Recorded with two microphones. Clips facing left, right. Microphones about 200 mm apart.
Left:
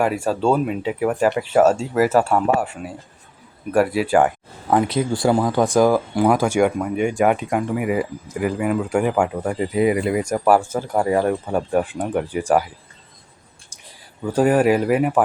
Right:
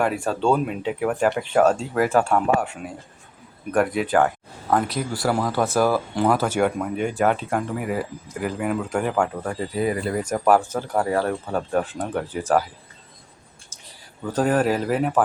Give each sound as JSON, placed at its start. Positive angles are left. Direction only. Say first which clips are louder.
{"t": 0.0, "sound": "speech", "louder": "left 2 dB", "side_deg": 5}
{"t": 4.9, "sound": "speech", "louder": "left 5 dB", "side_deg": 25}
{"t": 14.3, "sound": "speech", "louder": "left 4 dB", "side_deg": 10}